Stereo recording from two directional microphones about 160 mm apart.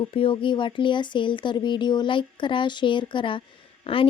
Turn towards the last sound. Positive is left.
turn(degrees=35)  # may be behind; listen again after turning